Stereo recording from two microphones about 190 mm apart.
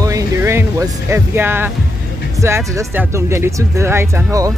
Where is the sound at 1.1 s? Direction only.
10° right (ahead or behind).